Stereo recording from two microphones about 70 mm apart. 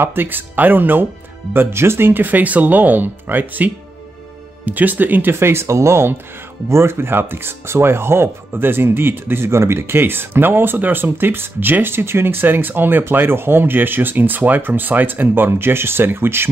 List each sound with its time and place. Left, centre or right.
0.0 s speech: right